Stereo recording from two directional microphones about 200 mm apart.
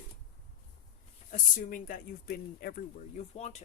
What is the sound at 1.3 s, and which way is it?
Speech, 45° left (ahead or behind).